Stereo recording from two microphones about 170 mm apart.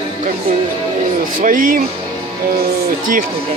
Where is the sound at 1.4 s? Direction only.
50° right (ahead or behind).